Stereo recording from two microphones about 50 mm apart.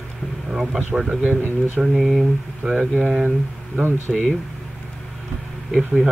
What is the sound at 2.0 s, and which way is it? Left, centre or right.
Speech, centre.